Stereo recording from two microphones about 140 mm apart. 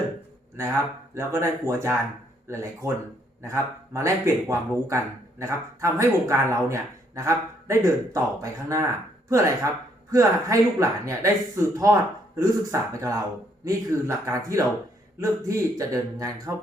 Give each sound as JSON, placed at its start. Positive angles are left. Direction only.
{"t": 1.1, "sound": "speech", "side_deg": -20}